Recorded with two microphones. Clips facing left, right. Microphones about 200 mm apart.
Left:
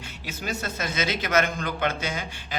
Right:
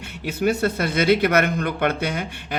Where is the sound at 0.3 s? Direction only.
60° right (ahead or behind).